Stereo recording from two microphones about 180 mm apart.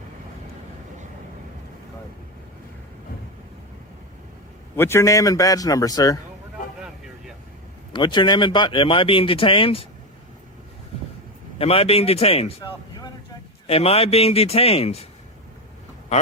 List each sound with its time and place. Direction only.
4.8 s speech: 15° left (ahead or behind)
7.9 s speech: 25° left (ahead or behind)
11.5 s a man's voice: 30° left (ahead or behind)